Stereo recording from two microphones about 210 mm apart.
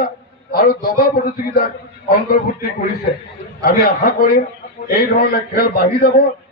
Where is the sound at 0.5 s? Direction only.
45° left (ahead or behind).